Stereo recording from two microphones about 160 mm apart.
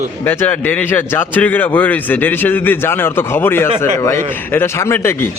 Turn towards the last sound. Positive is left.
turn(degrees=15)  # may be behind; listen again after turning